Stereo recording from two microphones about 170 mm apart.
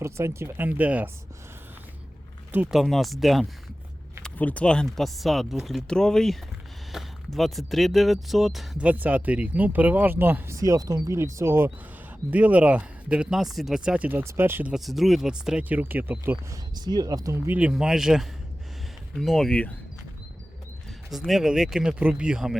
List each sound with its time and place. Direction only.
0.0 s speech: 15° right (ahead or behind)
2.5 s speech: 5° right (ahead or behind)
6.9 s a sound: centre (ahead or behind)
7.3 s speech: centre (ahead or behind)
16.7 s speech: 25° right (ahead or behind); by 19.7 s 5° left (ahead or behind)
21.1 s speech: centre (ahead or behind)